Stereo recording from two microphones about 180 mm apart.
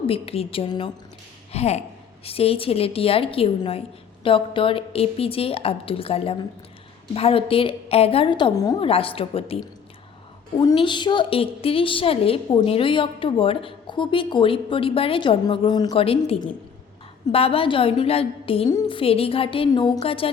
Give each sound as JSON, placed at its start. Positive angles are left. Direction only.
{"t": 0.1, "sound": "a woman's voice", "side_deg": 35}
{"t": 8.9, "sound": "a woman's voice", "side_deg": 30}
{"t": 10.8, "sound": "a woman's voice", "side_deg": 25}